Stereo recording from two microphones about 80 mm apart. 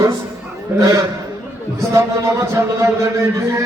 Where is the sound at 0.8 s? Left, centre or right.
Right.